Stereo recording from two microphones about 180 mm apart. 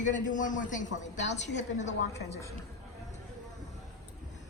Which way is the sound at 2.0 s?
70° left (ahead or behind).